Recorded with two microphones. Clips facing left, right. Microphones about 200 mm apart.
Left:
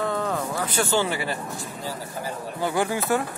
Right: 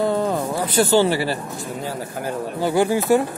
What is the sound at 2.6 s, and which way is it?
Speech, 30° right (ahead or behind).